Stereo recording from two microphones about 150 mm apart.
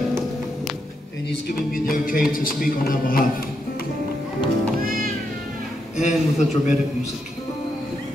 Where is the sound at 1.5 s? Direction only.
70° left (ahead or behind).